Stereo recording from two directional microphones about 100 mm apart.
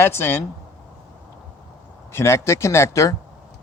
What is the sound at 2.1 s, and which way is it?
Speech, 30° left (ahead or behind).